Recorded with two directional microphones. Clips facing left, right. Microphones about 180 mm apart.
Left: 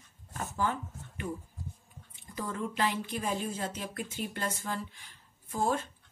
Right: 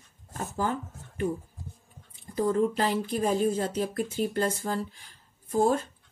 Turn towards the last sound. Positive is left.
turn(degrees=-40)  # may be behind; listen again after turning